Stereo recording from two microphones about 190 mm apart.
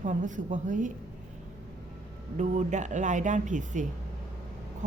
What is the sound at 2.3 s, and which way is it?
Speech, 40° right (ahead or behind).